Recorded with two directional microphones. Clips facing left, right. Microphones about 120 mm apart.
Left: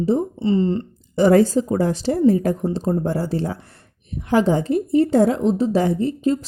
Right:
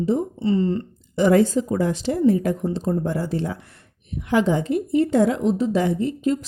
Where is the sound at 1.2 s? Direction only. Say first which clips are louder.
Left 2 dB; 35° left (ahead or behind).